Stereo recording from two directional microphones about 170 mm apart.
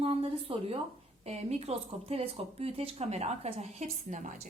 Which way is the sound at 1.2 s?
40° right (ahead or behind).